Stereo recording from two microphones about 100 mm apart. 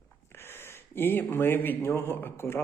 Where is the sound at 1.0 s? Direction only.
20° left (ahead or behind).